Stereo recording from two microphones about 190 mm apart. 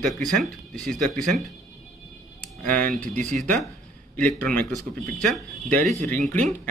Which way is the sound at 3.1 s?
40° right (ahead or behind).